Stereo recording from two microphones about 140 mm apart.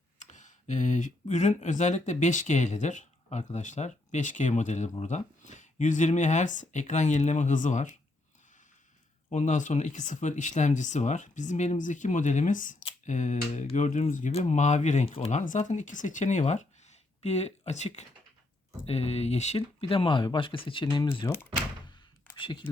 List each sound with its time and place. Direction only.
0.2 s speech: 60° left (ahead or behind)
9.3 s speech: 60° left (ahead or behind)
15.0 s speech: 45° left (ahead or behind)
15.3 s speech: 60° left (ahead or behind); by 21.2 s 35° left (ahead or behind)
22.4 s speech: 35° left (ahead or behind)